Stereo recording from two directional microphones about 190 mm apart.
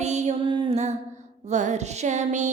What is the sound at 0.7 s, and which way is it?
Music, 35° right (ahead or behind).